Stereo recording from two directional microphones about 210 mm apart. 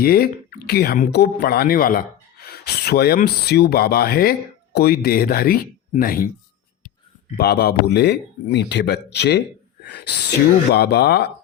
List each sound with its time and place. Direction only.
0.0 s speech: 45° left (ahead or behind)
7.3 s speech: 50° left (ahead or behind)